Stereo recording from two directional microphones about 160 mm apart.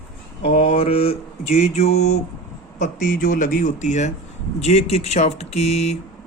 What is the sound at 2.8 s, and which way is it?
Speech, 50° left (ahead or behind).